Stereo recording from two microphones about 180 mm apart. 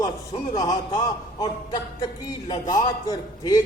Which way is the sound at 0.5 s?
20° left (ahead or behind).